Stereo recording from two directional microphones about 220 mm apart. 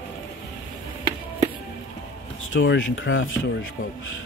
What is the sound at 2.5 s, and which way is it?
Speech, 60° left (ahead or behind).